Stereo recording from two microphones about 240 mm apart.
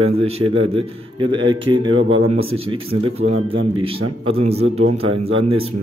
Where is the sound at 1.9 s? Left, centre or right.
Right.